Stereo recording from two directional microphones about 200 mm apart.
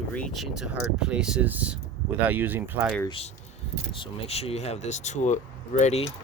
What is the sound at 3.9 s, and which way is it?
Speech, 30° left (ahead or behind).